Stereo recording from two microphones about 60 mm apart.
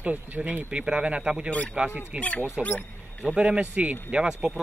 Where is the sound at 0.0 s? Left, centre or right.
Right.